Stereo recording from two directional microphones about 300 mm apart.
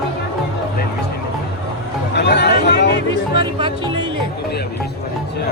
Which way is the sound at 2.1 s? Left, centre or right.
Left.